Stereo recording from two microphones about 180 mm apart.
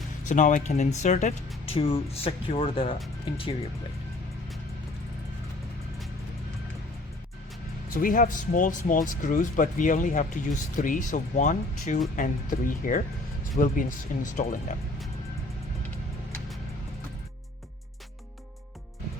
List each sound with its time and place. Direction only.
0.3 s speech: 45° left (ahead or behind)
7.9 s speech: 50° left (ahead or behind)